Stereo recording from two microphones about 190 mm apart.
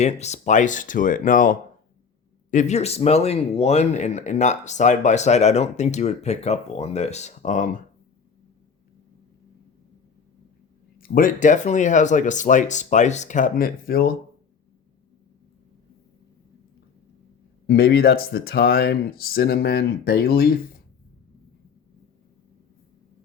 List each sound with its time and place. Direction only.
0.0 s speech: 35° left (ahead or behind)
10.9 s speech: 50° left (ahead or behind)
17.7 s speech: 55° left (ahead or behind)